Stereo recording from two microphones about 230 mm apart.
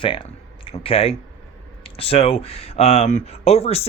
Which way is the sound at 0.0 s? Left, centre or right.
Left.